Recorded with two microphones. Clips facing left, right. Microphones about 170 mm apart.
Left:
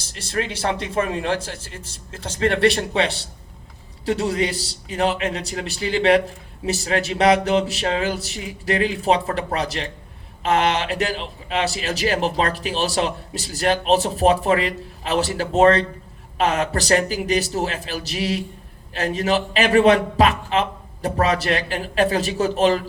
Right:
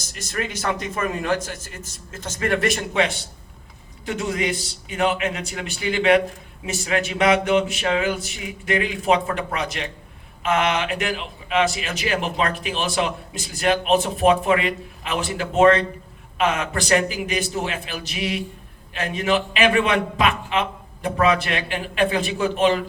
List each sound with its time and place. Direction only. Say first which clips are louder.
0.0 s a man's voice: left 3 dB; 30° left (ahead or behind)